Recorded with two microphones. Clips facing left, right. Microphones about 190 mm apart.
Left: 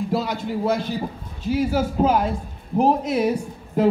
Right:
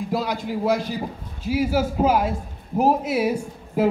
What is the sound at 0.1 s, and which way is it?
A man's voice, centre (ahead or behind).